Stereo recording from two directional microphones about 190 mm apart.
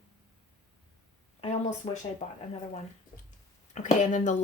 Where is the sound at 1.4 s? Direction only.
35° left (ahead or behind).